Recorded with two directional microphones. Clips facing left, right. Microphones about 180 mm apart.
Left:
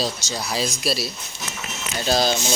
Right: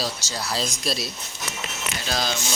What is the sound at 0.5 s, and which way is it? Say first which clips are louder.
Speech: left 3 dB; 5° left (ahead or behind).